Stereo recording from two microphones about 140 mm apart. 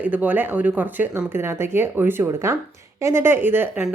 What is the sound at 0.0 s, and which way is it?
Speech, 10° right (ahead or behind).